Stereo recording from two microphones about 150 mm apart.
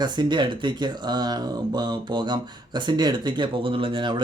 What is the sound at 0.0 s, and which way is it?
Speech, 30° right (ahead or behind).